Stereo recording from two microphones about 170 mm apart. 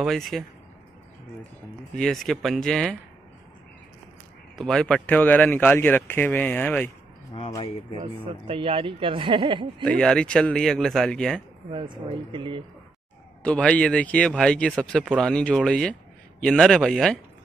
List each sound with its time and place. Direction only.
0.0 s speech: centre (ahead or behind)
2.0 s speech: centre (ahead or behind)
4.6 s speech: 5° left (ahead or behind)
8.5 s speech: 35° right (ahead or behind)
9.8 s speech: 5° left (ahead or behind)
11.7 s speech: 30° right (ahead or behind)
13.4 s speech: 5° left (ahead or behind)